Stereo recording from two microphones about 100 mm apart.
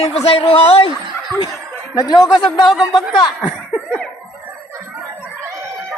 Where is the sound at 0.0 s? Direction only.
85° left.